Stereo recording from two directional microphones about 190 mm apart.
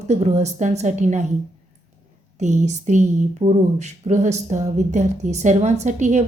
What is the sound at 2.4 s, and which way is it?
Speech, 40° right (ahead or behind).